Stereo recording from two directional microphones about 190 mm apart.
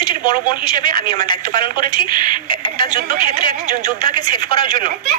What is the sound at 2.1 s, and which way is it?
Speech, 25° left (ahead or behind).